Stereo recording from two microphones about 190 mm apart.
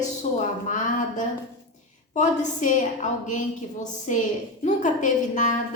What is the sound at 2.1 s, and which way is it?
A woman's voice, 40° left (ahead or behind).